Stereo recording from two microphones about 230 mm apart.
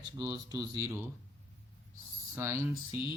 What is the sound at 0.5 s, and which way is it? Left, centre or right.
Mantra, centre.